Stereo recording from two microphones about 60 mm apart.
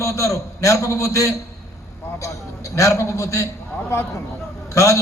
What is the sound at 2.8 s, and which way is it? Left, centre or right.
Speech, left.